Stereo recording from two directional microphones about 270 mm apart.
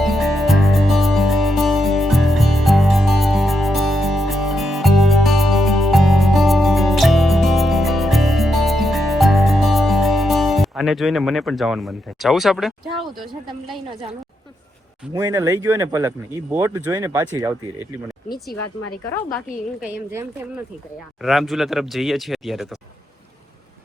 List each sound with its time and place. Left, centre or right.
0.0 s music: centre
13.7 s speech: centre
15.1 s speech: centre
18.6 s speech: left
19.8 s speech: centre